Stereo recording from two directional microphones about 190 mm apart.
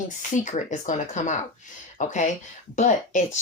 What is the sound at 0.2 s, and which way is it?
Speech, 45° left (ahead or behind).